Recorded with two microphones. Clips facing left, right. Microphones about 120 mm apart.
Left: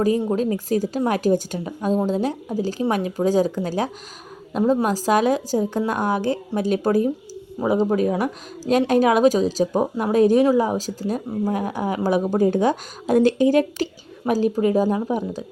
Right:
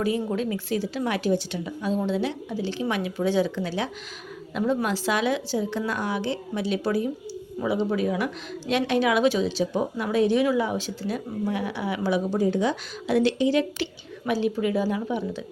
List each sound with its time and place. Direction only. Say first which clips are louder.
0.0 s a woman's voice: left 6 dB; 40° left (ahead or behind)